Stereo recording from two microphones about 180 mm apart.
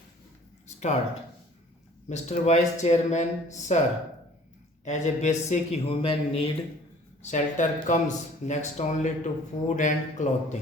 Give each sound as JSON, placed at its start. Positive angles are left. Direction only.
{"t": 2.0, "sound": "speech", "side_deg": 40}
{"t": 4.9, "sound": "speech", "side_deg": 40}
{"t": 7.2, "sound": "speech", "side_deg": 40}